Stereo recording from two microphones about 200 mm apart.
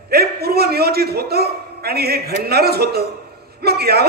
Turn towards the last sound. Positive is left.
turn(degrees=-50)  # may be behind; listen again after turning